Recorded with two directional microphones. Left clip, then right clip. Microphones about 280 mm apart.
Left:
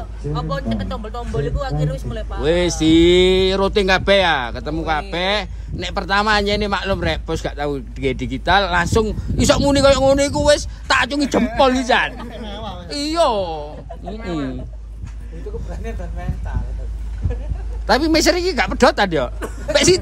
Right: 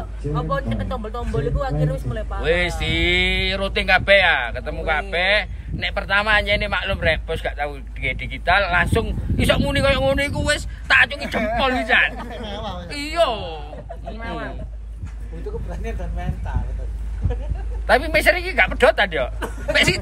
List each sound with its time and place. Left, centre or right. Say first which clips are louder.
0.3 s a man's voice: even; centre
2.4 s speech: left 4 dB; centre
12.2 s a man's voice: right 1 dB; centre
12.9 s speech: left 3 dB; centre
15.7 s speech: even; right
17.8 s a man's voice: left 1 dB; centre